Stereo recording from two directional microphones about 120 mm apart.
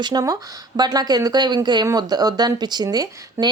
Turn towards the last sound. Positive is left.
turn(degrees=-30)  # may be behind; listen again after turning